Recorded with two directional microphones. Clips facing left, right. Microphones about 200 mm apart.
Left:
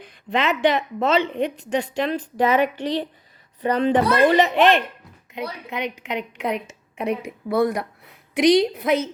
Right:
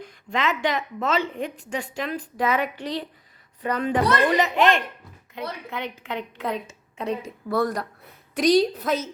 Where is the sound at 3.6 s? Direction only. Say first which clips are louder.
Left 4 dB; 25° left (ahead or behind).